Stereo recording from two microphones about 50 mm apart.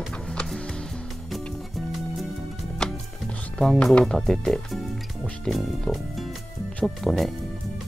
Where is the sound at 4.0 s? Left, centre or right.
Centre.